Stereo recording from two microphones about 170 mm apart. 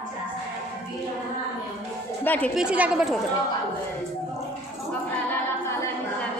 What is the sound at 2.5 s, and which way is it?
Speech, 5° right (ahead or behind).